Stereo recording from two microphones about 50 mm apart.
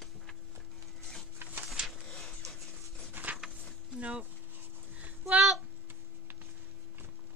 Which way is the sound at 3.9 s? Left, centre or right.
Right.